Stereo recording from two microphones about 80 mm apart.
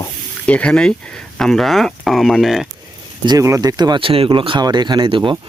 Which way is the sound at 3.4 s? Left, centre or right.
Right.